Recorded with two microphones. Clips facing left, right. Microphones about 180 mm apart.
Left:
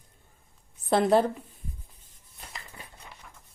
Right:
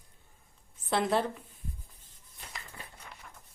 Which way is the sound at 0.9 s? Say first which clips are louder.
Left 7 dB; 40° left (ahead or behind).